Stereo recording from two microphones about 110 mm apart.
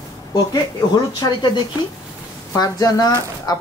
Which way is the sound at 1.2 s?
35° left (ahead or behind).